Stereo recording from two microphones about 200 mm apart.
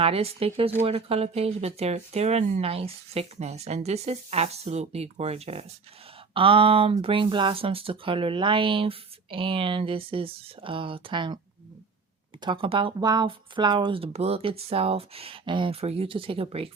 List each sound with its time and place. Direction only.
0.0 s speech: 30° right (ahead or behind)
12.4 s speech: 25° right (ahead or behind)